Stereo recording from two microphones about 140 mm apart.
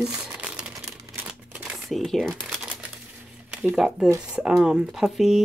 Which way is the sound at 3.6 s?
5° right (ahead or behind).